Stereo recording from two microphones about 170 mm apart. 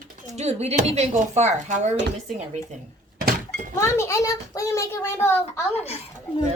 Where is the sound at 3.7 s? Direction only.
15° left (ahead or behind).